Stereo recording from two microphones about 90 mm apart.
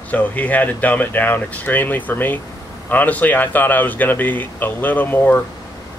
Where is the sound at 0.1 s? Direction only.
20° left (ahead or behind).